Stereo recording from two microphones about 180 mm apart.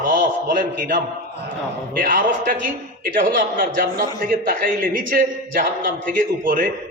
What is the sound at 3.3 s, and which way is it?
A man's voice, 50° right (ahead or behind).